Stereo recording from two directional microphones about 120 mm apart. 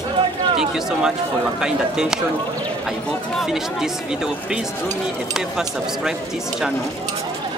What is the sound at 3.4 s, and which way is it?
Speech, 5° right (ahead or behind).